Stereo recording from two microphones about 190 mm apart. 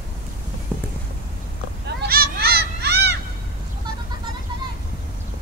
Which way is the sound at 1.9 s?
55° right (ahead or behind).